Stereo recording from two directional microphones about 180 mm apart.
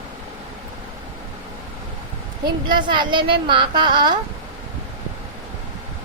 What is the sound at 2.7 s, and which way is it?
A woman's voice, 25° right (ahead or behind).